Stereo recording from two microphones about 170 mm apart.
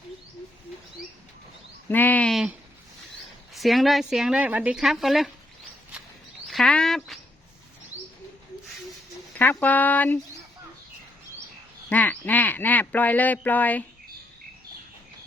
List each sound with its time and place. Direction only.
1.9 s a woman's voice: 10° left (ahead or behind)
6.5 s a sound: 5° left (ahead or behind)
9.4 s speech: 10° left (ahead or behind)
11.9 s speech: 10° left (ahead or behind)